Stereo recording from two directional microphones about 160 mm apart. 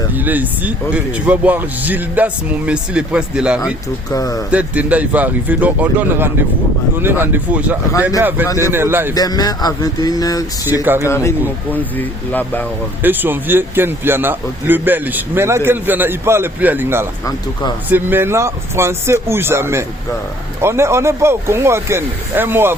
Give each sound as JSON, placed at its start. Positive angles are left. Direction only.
{"t": 0.1, "sound": "a man's voice", "side_deg": -10}
{"t": 4.1, "sound": "speech", "side_deg": 20}
{"t": 4.5, "sound": "a man's voice", "side_deg": -10}
{"t": 9.1, "sound": "speech", "side_deg": 25}
{"t": 13.0, "sound": "a man's voice", "side_deg": -10}